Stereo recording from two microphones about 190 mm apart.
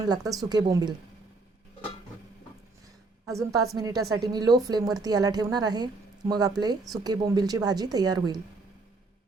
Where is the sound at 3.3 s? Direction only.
15° right (ahead or behind).